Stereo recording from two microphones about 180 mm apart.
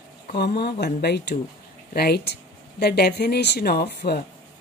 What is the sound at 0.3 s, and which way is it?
Speech, 65° left (ahead or behind).